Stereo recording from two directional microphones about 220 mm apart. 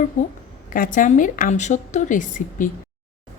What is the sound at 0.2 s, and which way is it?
A woman's voice, 35° left (ahead or behind).